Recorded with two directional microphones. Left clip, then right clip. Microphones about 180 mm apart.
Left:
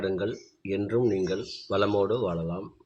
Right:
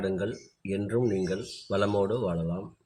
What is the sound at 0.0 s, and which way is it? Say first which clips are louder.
Speech: left 2 dB; 5° left (ahead or behind).